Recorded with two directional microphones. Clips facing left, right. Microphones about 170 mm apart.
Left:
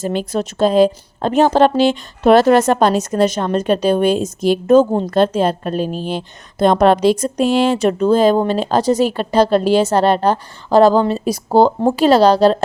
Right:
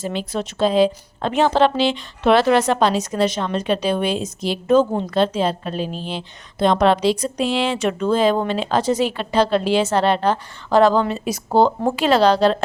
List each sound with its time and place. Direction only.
0.0 s a woman's voice: 45° left (ahead or behind)